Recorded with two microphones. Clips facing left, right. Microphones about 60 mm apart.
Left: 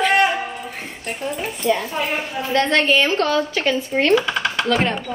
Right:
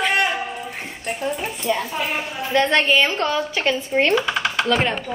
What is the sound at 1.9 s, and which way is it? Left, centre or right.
Speech, centre.